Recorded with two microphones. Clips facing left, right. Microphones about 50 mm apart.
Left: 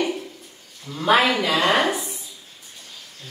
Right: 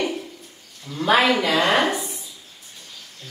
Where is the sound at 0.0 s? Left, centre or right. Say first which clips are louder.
Left 1 dB; centre.